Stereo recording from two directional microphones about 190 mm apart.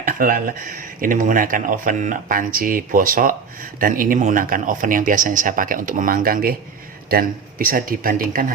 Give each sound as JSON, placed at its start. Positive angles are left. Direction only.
{"t": 0.0, "sound": "speech", "side_deg": -45}